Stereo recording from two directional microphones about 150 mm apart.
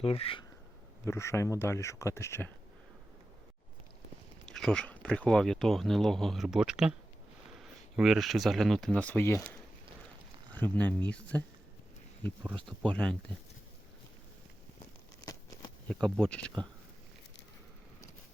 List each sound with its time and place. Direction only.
0.0 s speech: 40° left (ahead or behind)
1.0 s speech: 20° left (ahead or behind)
4.4 s speech: 5° left (ahead or behind)
12.6 s speech: 5° left (ahead or behind)
15.2 s a sound: 20° left (ahead or behind)
15.9 s speech: 5° left (ahead or behind)